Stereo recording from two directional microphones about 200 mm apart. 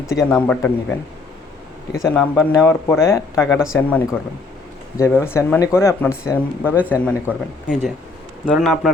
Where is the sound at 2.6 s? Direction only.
15° left (ahead or behind).